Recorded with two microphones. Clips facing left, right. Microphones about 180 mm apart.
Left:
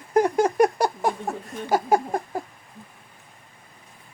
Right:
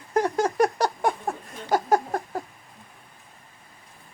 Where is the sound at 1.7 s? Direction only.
10° left (ahead or behind).